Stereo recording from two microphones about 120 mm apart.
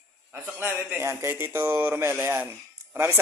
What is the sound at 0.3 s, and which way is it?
Speech, 15° right (ahead or behind).